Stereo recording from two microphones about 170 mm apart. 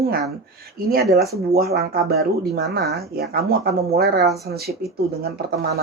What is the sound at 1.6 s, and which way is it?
Speech, 65° right (ahead or behind).